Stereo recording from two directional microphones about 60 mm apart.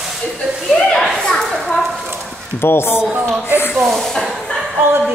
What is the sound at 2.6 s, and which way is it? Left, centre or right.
Speech, left.